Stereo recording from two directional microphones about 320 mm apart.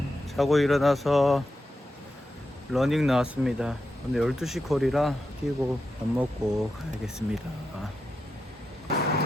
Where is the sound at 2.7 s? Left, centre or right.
Centre.